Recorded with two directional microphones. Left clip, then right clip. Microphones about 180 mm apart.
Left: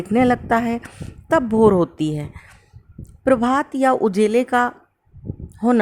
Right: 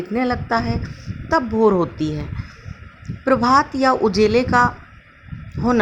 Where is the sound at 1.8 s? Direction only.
60° left (ahead or behind).